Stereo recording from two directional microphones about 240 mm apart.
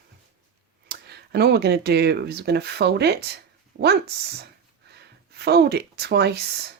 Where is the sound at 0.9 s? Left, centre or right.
Right.